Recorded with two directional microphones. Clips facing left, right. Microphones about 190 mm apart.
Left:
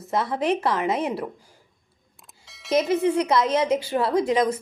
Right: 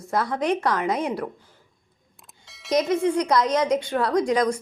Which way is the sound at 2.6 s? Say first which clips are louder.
Even; centre (ahead or behind).